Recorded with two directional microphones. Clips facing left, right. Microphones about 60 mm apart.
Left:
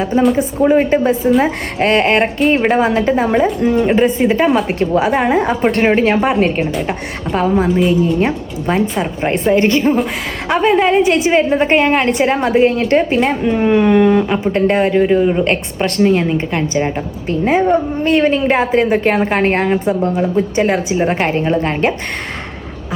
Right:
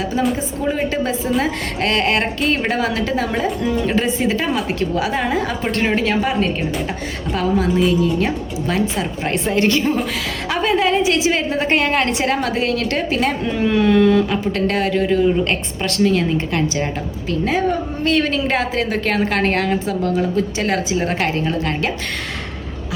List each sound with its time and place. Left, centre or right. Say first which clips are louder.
0.2 s speech: left 7 dB; centre
0.6 s a woman's voice: left 9 dB; left
7.3 s a woman's voice: left 4 dB; left